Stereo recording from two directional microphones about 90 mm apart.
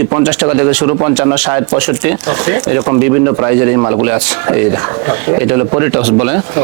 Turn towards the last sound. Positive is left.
turn(degrees=-15)  # may be behind; listen again after turning